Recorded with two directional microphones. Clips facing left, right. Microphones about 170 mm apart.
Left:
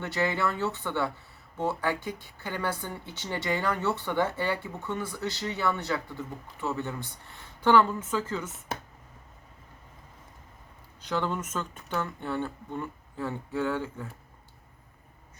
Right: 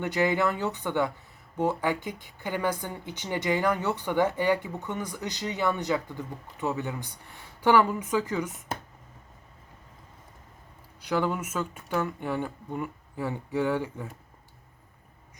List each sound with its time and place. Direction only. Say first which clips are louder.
0.0 s speech: right 3 dB; 15° right (ahead or behind)
11.0 s speech: right 3 dB; 10° right (ahead or behind)